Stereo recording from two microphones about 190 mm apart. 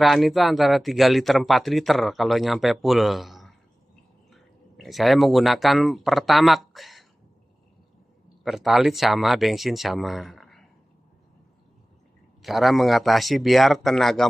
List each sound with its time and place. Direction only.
0.0 s speech: centre (ahead or behind)
8.5 s speech: centre (ahead or behind)
12.4 s speech: centre (ahead or behind)